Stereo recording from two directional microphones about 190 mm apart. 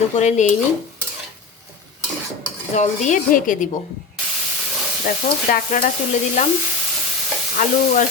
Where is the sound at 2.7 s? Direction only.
40° left (ahead or behind).